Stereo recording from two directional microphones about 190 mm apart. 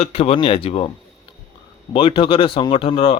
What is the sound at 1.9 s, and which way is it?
A man's voice, 25° left (ahead or behind).